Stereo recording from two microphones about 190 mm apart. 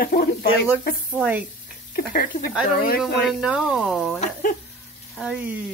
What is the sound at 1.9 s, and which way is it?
Speech, 45° left (ahead or behind).